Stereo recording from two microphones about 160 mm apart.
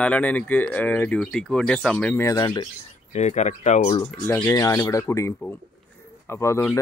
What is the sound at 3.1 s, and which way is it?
Speech, 45° left (ahead or behind).